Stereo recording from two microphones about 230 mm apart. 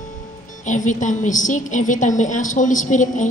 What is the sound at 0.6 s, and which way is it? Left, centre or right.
A woman's voice, left.